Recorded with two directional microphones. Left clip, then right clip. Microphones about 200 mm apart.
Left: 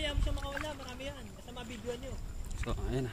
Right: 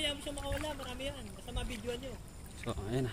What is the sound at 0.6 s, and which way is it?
Speech, 40° right (ahead or behind).